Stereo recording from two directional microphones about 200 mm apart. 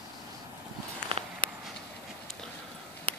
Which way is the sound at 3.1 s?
30° right (ahead or behind).